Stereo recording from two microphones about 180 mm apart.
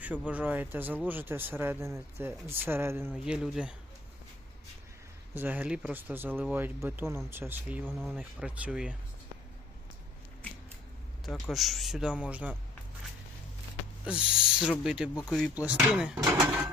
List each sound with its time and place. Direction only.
0.0 s speech: 10° right (ahead or behind)
5.3 s a man's voice: 10° right (ahead or behind)
11.3 s a man's voice: centre (ahead or behind)
14.0 s a man's voice: 5° right (ahead or behind)